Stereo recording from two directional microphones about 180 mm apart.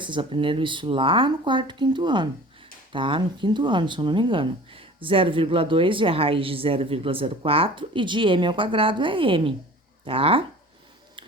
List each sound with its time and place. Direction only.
0.0 s speech: 25° right (ahead or behind)